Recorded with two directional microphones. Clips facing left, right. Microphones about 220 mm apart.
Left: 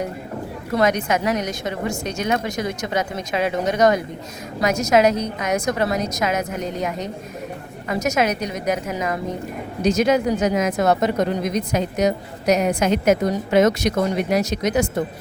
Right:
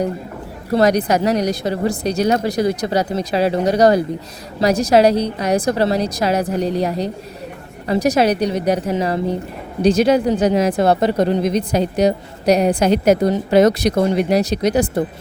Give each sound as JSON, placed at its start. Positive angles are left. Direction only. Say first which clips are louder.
{"t": 0.7, "sound": "speech", "louder": "right 5 dB", "side_deg": -35}